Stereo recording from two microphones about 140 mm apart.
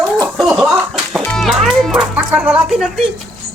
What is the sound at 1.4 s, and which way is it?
Music, centre (ahead or behind).